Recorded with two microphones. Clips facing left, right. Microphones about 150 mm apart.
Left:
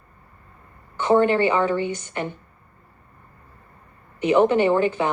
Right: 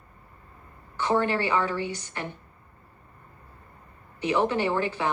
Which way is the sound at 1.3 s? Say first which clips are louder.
Left 6 dB; 20° left (ahead or behind).